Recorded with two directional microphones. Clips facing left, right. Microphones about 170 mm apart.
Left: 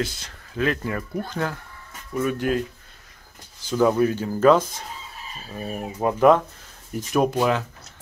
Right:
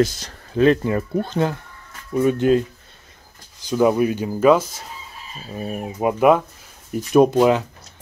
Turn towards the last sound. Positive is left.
turn(degrees=-20)  # may be behind; listen again after turning